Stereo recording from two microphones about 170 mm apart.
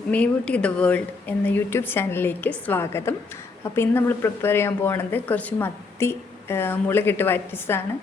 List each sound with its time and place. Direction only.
0.1 s speech: 10° left (ahead or behind)